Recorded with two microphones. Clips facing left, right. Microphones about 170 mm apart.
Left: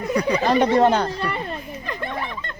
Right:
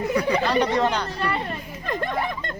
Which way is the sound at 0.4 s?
50° left (ahead or behind).